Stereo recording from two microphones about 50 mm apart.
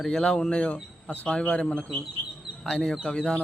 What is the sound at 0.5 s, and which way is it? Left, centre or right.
Speech, left.